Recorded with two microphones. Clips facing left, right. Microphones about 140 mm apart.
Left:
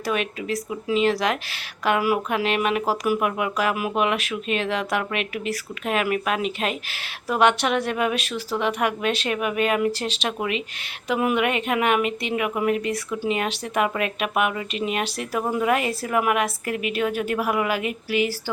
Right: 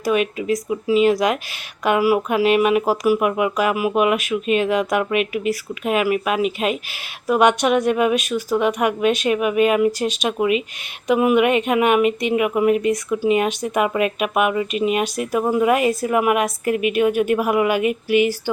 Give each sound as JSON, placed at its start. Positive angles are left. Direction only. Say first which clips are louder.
{"t": 0.0, "sound": "speech", "louder": "right 6 dB", "side_deg": -10}